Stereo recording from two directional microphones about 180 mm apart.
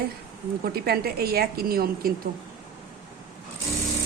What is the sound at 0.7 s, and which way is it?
A man's voice, 60° right (ahead or behind).